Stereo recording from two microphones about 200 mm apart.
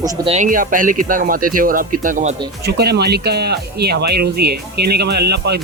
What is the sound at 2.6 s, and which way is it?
Speech, 55° right (ahead or behind).